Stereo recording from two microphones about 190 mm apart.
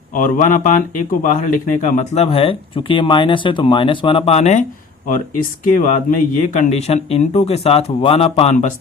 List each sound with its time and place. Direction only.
0.1 s speech: 45° left (ahead or behind)
5.0 s speech: 45° left (ahead or behind)